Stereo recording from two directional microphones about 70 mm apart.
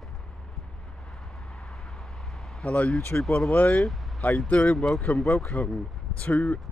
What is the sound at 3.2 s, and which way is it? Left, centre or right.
Speech, centre.